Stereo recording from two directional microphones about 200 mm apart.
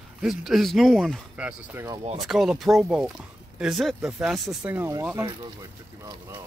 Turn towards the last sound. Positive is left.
turn(degrees=-15)  # may be behind; listen again after turning